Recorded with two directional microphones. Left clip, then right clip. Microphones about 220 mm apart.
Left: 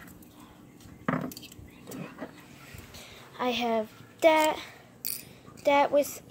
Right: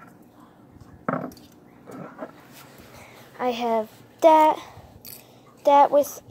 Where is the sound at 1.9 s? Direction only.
45° left (ahead or behind).